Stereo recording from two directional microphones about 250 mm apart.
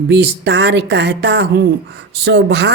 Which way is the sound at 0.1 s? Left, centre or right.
Right.